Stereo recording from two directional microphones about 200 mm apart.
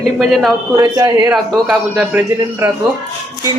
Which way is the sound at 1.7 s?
5° right (ahead or behind).